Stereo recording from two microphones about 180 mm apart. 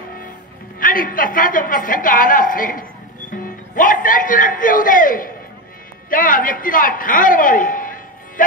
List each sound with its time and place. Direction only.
0.7 s a woman's voice: 50° left (ahead or behind)